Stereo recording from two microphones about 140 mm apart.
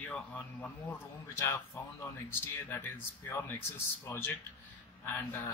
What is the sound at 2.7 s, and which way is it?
A man's voice, 15° left (ahead or behind).